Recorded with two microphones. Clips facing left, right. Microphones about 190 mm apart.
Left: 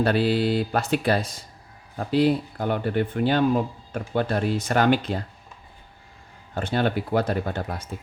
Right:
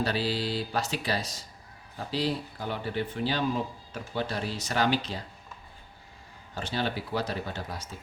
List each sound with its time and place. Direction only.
0.0 s speech: 55° left (ahead or behind)
6.5 s speech: 55° left (ahead or behind)